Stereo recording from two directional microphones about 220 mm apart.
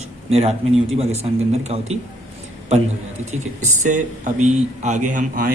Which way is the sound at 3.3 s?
35° right (ahead or behind).